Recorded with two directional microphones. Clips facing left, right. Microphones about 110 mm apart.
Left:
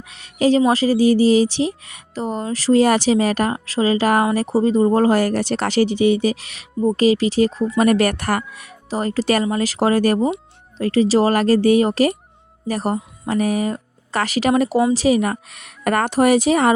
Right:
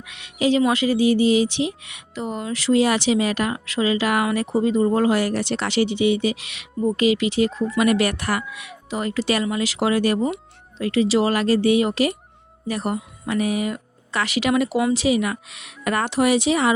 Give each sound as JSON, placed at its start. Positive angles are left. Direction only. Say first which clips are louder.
{"t": 0.0, "sound": "a sound", "louder": "left 4 dB", "side_deg": 35}
{"t": 0.6, "sound": "speech", "louder": "left 3 dB", "side_deg": 35}
{"t": 10.2, "sound": "speech", "louder": "left 3 dB", "side_deg": 20}
{"t": 10.8, "sound": "a woman's voice", "louder": "left 3 dB", "side_deg": 40}